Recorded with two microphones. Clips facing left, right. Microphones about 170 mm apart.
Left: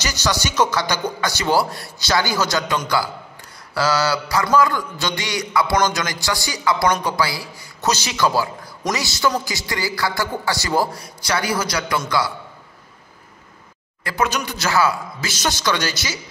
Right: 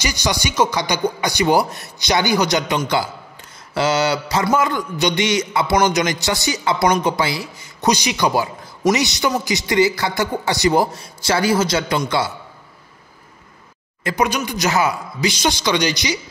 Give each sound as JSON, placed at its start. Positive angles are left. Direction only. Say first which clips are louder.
{"t": 0.0, "sound": "a man's voice", "louder": "right 1 dB", "side_deg": -15}
{"t": 14.0, "sound": "a man's voice", "louder": "right 2 dB", "side_deg": -15}